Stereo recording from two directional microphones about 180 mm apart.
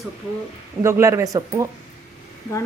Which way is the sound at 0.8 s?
15° right (ahead or behind).